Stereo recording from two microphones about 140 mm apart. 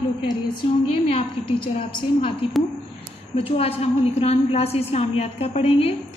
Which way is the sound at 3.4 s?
45° left (ahead or behind).